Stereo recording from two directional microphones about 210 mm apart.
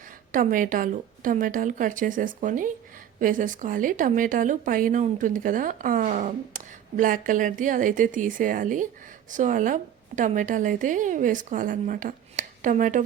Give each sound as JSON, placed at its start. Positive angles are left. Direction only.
{"t": 0.3, "sound": "a woman's voice", "side_deg": -40}